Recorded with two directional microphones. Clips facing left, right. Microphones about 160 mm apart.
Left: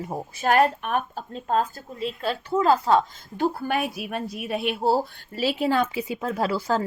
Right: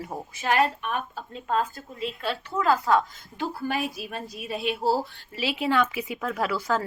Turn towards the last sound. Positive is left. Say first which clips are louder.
# left 2 dB
turn(degrees=30)  # may be behind; listen again after turning